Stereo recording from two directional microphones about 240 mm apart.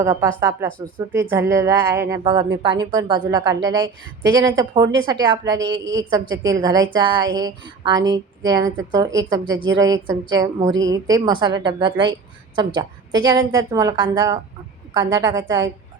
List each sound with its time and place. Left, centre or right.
0.0 s a woman's voice: centre
5.7 s a woman's voice: right
6.1 s a woman's voice: centre